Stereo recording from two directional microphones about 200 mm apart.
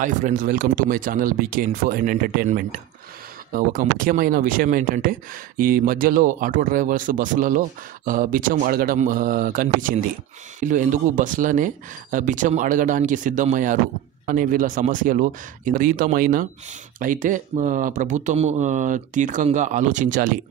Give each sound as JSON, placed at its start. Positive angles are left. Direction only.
{"t": 0.0, "sound": "speech", "side_deg": -40}